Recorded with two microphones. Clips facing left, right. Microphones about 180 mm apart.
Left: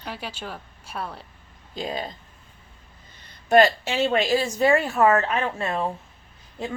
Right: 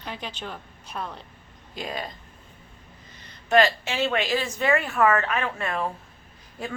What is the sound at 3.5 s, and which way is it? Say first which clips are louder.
A woman's voice: left 3 dB; 35° left (ahead or behind).